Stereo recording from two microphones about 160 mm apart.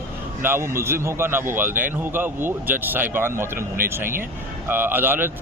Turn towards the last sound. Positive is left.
turn(degrees=-15)  # may be behind; listen again after turning